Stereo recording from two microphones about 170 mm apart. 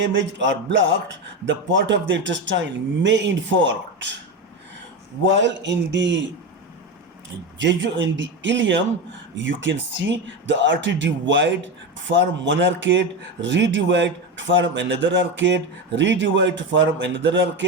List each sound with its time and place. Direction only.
0.0 s a man's voice: 90° right
5.2 s a man's voice: 90° right
7.6 s a man's voice: 90° right